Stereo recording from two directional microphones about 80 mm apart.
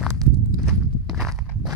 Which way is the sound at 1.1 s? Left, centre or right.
Centre.